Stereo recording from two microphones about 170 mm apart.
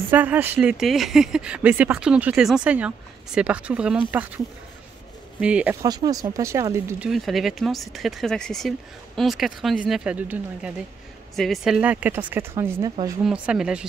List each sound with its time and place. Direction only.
0.1 s a woman's voice: 10° right (ahead or behind)
5.4 s a woman's voice: 5° right (ahead or behind)
5.8 s speech: 20° right (ahead or behind)
7.1 s a woman's voice: centre (ahead or behind)
13.2 s speech: 5° right (ahead or behind)